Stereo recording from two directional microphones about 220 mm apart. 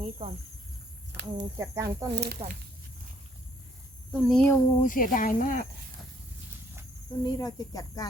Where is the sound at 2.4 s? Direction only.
25° right (ahead or behind).